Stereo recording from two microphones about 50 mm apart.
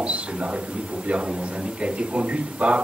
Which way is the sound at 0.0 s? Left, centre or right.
Right.